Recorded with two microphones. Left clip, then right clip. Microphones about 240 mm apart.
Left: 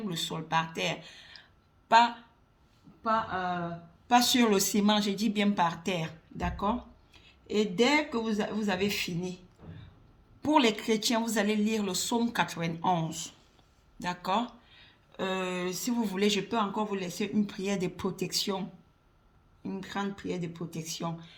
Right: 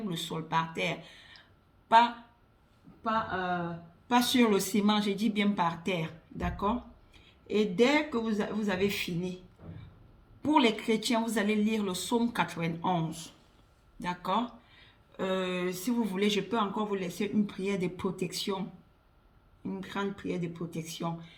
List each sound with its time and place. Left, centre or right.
0.0 s speech: left
10.4 s speech: left
19.6 s speech: left